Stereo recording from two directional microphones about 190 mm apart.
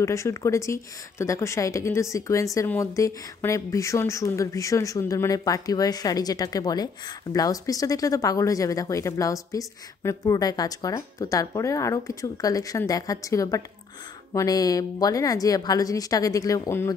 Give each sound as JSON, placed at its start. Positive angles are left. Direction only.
{"t": 0.0, "sound": "a woman's voice", "side_deg": 15}